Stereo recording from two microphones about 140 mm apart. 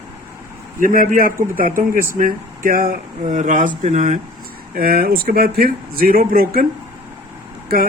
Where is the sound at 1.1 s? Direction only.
85° right; by 4.2 s 60° right (ahead or behind).